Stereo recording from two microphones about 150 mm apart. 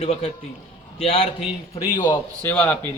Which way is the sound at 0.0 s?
45° left (ahead or behind).